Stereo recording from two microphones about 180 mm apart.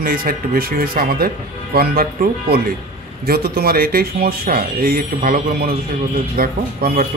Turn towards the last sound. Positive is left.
turn(degrees=-55)  # may be behind; listen again after turning